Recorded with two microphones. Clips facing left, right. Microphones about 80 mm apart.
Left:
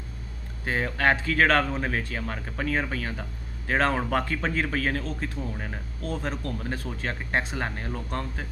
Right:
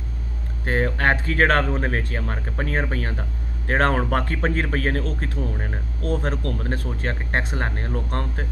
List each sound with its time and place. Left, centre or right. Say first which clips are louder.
0.7 s speech: right 3 dB; right